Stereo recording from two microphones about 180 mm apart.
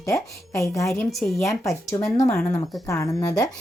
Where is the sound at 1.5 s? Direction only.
15° left (ahead or behind).